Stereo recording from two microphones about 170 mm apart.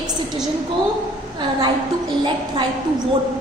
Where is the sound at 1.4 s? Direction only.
25° right (ahead or behind).